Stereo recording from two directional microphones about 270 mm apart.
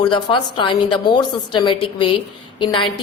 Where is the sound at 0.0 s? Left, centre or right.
Centre.